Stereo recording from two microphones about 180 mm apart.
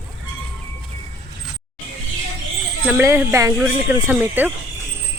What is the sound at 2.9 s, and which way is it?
Speech, 10° right (ahead or behind).